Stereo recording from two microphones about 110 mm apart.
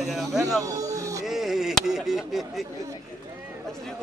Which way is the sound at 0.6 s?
30° right (ahead or behind).